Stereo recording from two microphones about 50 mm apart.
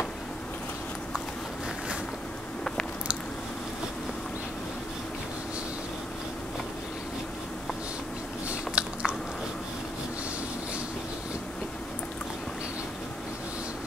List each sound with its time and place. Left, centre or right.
8.5 s biting: right